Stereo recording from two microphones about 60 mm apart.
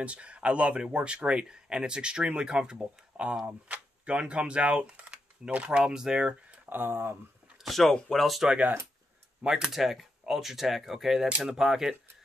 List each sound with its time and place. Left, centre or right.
0.0 s speech: right
6.7 s speech: right
7.6 s speech: centre
9.4 s speech: centre